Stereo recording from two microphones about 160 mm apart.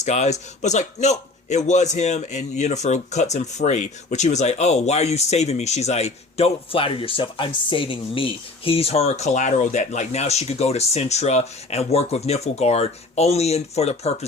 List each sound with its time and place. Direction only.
0.0 s speech: 45° left (ahead or behind)